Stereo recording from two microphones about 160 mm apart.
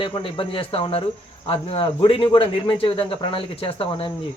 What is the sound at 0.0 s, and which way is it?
Speech, 30° left (ahead or behind).